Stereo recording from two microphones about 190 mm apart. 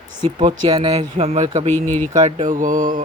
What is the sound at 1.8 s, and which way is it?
Speech, 10° left (ahead or behind).